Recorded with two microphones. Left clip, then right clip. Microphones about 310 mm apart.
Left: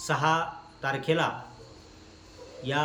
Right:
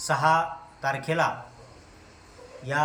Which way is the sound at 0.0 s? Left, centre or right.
Centre.